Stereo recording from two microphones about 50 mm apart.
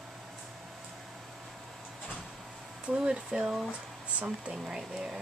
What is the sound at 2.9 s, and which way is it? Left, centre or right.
Speech, centre.